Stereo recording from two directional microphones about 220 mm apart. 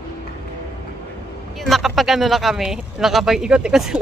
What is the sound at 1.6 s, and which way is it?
Speech, centre (ahead or behind).